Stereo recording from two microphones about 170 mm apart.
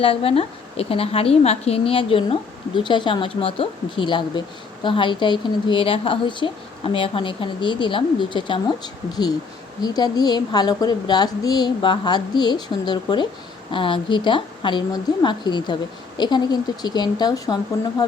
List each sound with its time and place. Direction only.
0.0 s a woman's voice: 35° left (ahead or behind)